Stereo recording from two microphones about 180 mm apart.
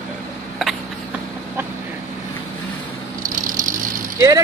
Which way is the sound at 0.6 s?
Centre (ahead or behind).